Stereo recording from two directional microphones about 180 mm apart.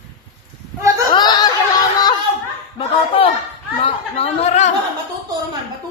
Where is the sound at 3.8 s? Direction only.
35° left (ahead or behind).